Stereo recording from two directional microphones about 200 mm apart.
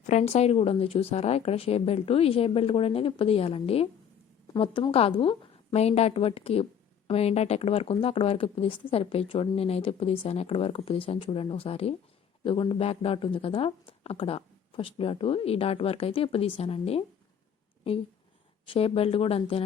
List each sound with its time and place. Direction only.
0.0 s speech: 35° left (ahead or behind)
18.6 s speech: 25° left (ahead or behind)